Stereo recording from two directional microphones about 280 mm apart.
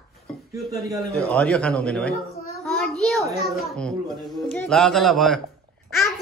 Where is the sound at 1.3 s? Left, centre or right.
Centre.